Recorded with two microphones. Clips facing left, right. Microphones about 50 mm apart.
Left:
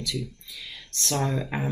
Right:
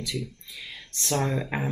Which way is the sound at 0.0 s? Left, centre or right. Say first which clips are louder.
Left 1 dB; right.